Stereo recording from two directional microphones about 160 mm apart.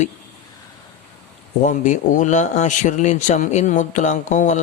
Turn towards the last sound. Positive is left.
turn(degrees=50)  # may be behind; listen again after turning